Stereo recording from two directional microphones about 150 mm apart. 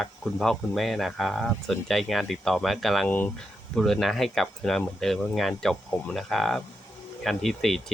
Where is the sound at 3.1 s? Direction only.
10° left (ahead or behind).